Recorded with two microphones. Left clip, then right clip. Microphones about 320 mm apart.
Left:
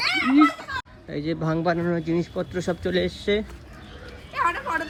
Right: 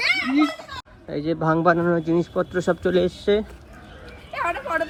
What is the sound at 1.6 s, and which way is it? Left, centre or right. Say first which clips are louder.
Speech: right 6 dB; right.